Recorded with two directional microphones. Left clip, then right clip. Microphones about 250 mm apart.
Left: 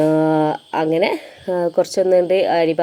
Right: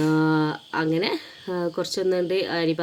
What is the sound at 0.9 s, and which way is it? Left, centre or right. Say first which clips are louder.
Speech: left 8 dB; right.